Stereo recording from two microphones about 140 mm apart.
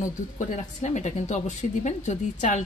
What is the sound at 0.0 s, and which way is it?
Speech, 60° left (ahead or behind).